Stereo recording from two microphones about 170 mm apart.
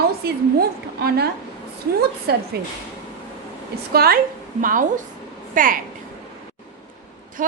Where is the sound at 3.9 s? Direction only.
65° right (ahead or behind).